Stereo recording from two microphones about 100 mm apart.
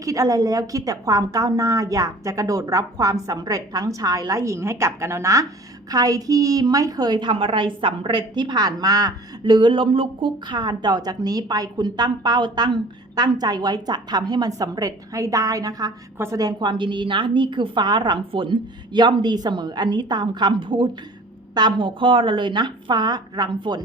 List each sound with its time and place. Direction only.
0.0 s a woman's voice: 35° right (ahead or behind)
16.1 s a woman's voice: 25° right (ahead or behind)
16.4 s a woman's voice: 45° right (ahead or behind)